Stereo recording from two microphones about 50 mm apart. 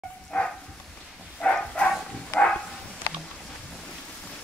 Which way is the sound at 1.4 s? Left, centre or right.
Centre.